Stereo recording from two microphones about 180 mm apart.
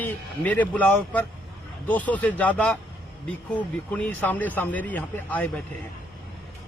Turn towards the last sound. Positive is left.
turn(degrees=10)  # may be behind; listen again after turning